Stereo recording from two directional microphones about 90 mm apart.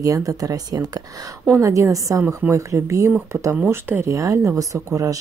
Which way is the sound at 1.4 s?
30° right (ahead or behind).